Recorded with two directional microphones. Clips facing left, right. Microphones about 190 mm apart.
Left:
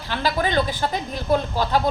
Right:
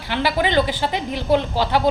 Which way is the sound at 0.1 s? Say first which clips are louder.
Right 3 dB; 10° right (ahead or behind).